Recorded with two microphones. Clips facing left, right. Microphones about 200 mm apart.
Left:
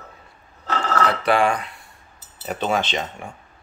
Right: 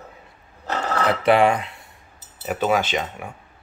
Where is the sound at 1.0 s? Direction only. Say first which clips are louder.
Right 4 dB; 20° right (ahead or behind).